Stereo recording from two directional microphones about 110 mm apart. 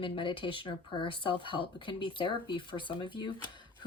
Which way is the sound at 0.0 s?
50° left (ahead or behind).